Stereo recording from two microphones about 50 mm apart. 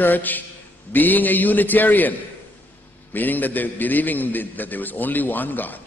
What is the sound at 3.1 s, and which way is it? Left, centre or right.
A man's voice, left.